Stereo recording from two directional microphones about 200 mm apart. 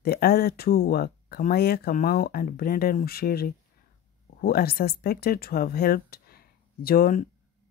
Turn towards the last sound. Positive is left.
turn(degrees=45)  # may be behind; listen again after turning